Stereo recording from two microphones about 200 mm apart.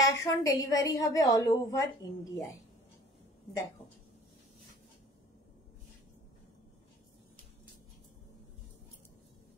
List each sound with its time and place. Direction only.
0.0 s a woman's voice: 20° left (ahead or behind)